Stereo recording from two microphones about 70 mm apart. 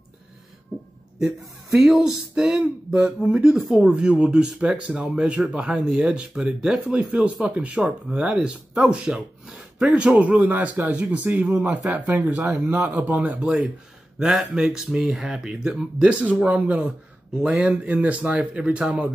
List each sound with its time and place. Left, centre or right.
1.2 s speech: centre
14.2 s speech: centre